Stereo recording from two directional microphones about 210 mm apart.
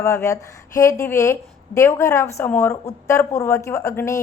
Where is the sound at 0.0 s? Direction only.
15° left (ahead or behind).